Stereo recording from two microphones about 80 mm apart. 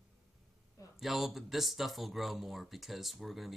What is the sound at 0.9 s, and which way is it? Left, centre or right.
Speech, centre.